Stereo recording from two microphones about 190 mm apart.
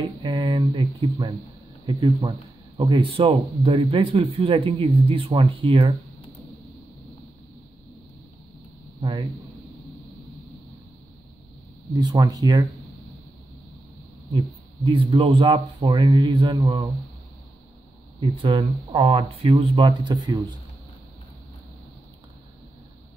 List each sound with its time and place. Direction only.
0.2 s speech: 25° right (ahead or behind)
9.0 s speech: 30° right (ahead or behind)
11.9 s speech: 20° right (ahead or behind)
14.8 s speech: 25° right (ahead or behind)
16.6 s speech: 30° right (ahead or behind)
18.2 s speech: 20° right (ahead or behind)